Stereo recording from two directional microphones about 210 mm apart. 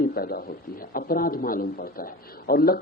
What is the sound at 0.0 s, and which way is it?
A man's voice, 45° left (ahead or behind).